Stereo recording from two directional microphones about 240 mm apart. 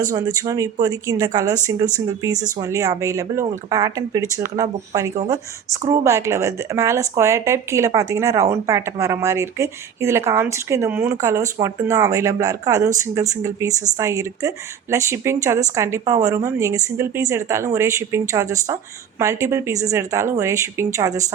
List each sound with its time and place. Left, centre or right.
0.1 s speech: centre